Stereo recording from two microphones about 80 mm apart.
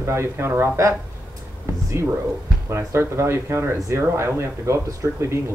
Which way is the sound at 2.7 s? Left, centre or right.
Right.